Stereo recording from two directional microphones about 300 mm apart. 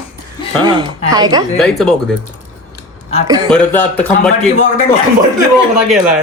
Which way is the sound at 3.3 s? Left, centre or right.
Centre.